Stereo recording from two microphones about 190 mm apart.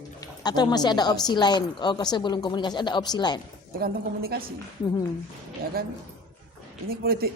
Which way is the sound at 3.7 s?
55° right (ahead or behind).